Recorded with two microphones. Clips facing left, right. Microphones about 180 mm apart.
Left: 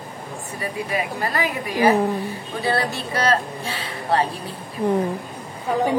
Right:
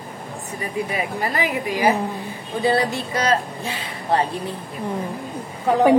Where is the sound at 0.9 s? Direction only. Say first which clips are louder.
Left 2 dB; 20° right (ahead or behind).